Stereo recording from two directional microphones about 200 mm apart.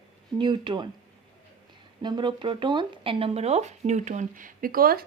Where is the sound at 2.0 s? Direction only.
20° right (ahead or behind); by 5.0 s 50° right (ahead or behind).